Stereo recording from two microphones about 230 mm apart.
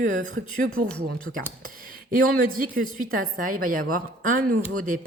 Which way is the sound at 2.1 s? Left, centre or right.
Right.